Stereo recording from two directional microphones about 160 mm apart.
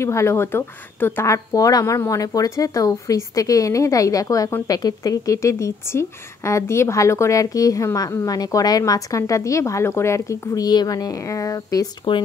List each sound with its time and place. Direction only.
0.0 s speech: 15° left (ahead or behind)